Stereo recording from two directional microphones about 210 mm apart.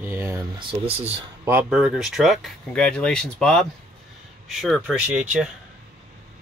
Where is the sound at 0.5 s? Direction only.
25° right (ahead or behind).